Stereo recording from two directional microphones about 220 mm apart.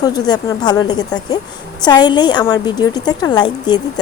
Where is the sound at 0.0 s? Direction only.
15° left (ahead or behind).